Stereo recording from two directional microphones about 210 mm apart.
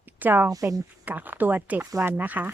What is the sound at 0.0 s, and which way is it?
Speech, 10° right (ahead or behind).